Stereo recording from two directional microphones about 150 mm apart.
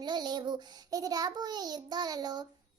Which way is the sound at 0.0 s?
30° right (ahead or behind).